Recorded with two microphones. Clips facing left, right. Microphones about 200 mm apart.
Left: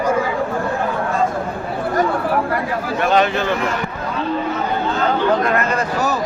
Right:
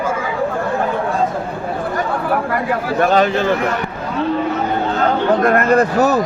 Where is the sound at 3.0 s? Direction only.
40° right (ahead or behind).